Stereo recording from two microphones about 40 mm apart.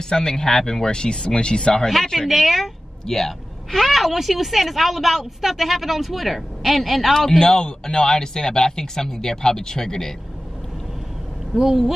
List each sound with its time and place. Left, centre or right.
0.1 s speech: centre
2.1 s a child's voice: centre
11.5 s speech: centre